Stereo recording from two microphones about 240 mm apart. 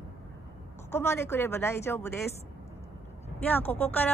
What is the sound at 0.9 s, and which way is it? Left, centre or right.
Speech, centre.